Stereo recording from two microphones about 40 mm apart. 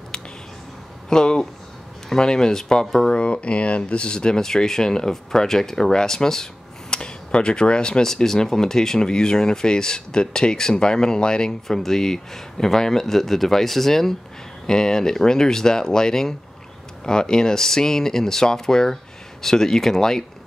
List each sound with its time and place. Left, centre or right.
1.1 s speech: left
3.1 s speech: left
11.6 s speech: centre